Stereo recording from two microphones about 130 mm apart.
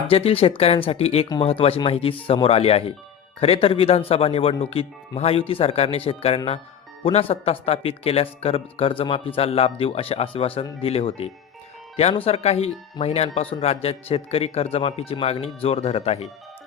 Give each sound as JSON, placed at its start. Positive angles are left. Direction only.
{"t": 0.1, "sound": "speech", "side_deg": 50}